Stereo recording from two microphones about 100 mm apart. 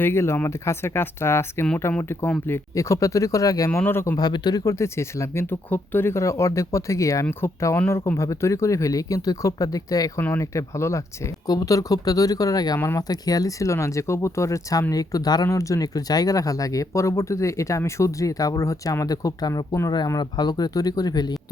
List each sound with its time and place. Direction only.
0.0 s speech: 25° left (ahead or behind)
3.7 s speech: 20° left (ahead or behind)
4.2 s speech: 45° left (ahead or behind)
10.2 s speech: 25° left (ahead or behind); by 21.3 s 40° left (ahead or behind)